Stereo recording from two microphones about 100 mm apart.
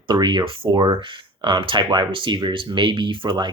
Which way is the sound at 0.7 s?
45° right (ahead or behind).